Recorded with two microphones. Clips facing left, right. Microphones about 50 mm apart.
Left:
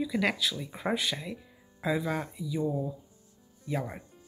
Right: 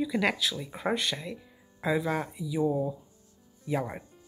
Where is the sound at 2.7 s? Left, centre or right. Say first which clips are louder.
Right 3 dB; right.